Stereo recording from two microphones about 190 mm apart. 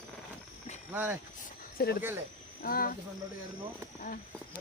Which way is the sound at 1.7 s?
55° left (ahead or behind).